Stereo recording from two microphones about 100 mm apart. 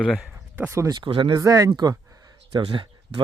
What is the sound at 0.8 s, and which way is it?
Speech, 50° right (ahead or behind).